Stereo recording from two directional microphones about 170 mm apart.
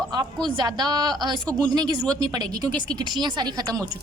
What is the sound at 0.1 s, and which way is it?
A woman's voice, 25° right (ahead or behind).